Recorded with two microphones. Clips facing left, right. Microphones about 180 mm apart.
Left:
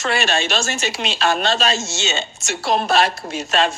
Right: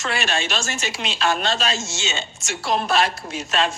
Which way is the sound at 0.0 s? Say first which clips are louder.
Left 4 dB; 75° left (ahead or behind).